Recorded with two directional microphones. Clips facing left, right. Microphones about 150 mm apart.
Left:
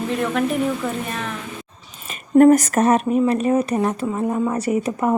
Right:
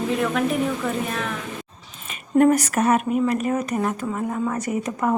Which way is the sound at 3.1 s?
30° left (ahead or behind).